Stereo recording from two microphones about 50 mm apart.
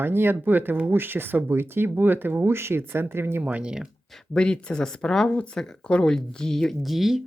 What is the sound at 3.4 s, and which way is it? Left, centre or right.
Speech, right.